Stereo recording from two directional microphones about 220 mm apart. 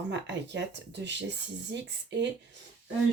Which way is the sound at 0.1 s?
55° right (ahead or behind).